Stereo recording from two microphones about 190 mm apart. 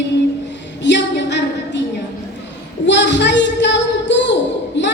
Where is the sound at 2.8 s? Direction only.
65° left (ahead or behind).